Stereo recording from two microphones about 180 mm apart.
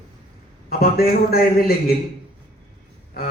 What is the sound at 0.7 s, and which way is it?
A man's voice, 55° left (ahead or behind).